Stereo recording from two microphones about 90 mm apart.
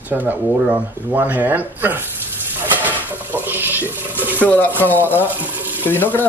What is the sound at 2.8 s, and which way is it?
Stir, 20° right (ahead or behind).